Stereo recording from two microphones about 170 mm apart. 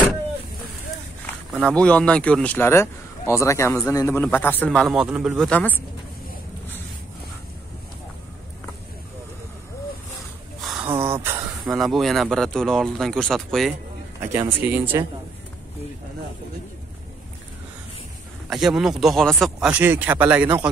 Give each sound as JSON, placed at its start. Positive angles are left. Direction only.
{"t": 1.5, "sound": "a man's voice", "side_deg": 5}
{"t": 10.6, "sound": "a sound", "side_deg": -5}
{"t": 10.9, "sound": "a sound", "side_deg": -15}
{"t": 11.6, "sound": "speech", "side_deg": 0}
{"t": 14.2, "sound": "speech", "side_deg": -15}
{"t": 18.5, "sound": "speech", "side_deg": 0}
{"t": 19.8, "sound": "speech", "side_deg": -10}